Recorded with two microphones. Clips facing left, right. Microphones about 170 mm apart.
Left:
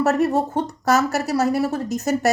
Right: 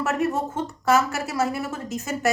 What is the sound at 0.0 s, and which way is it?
Speech, 40° left (ahead or behind).